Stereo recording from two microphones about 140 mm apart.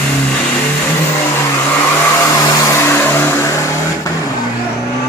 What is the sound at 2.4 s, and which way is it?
Vehicle, 20° left (ahead or behind).